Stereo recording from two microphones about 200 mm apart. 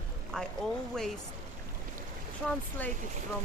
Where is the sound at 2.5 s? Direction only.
10° left (ahead or behind).